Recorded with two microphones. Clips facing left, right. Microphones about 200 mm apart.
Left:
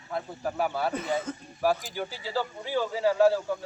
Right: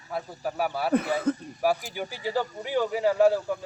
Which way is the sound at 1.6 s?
15° right (ahead or behind).